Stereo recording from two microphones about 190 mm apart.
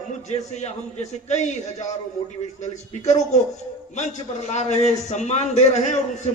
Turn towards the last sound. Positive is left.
turn(degrees=35)  # may be behind; listen again after turning